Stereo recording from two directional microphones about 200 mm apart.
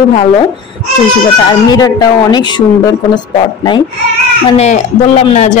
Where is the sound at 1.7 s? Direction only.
20° left (ahead or behind).